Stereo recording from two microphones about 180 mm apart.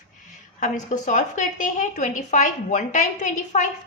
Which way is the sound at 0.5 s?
45° left (ahead or behind).